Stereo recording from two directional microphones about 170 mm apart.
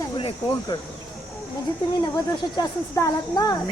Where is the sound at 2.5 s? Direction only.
25° left (ahead or behind).